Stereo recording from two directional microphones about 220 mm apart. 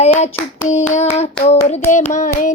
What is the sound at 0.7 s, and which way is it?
Hands, 35° left (ahead or behind).